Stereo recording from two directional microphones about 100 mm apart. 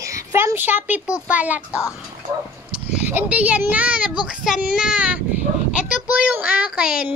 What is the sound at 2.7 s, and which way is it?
A child's voice, 20° right (ahead or behind).